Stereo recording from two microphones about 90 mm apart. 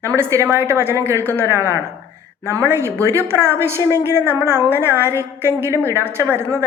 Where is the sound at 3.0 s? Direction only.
30° right (ahead or behind).